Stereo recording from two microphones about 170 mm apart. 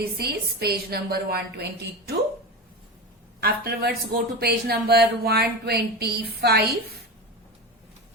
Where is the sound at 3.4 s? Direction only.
65° right (ahead or behind).